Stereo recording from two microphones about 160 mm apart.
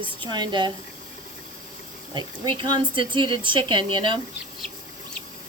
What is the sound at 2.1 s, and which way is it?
Speech, 30° right (ahead or behind).